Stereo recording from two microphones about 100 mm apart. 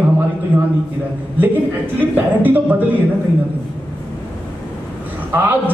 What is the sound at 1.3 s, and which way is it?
A man's voice, 20° right (ahead or behind).